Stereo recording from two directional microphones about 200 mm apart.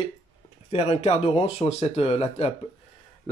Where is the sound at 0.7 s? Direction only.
30° left (ahead or behind).